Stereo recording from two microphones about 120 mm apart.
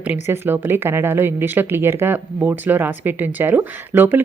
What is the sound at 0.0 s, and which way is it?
A woman's voice, 15° right (ahead or behind).